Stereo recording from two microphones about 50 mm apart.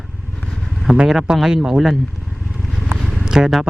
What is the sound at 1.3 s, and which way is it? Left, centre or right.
Speech, centre.